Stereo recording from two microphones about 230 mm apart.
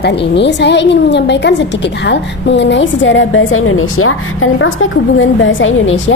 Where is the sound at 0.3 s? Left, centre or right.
Left.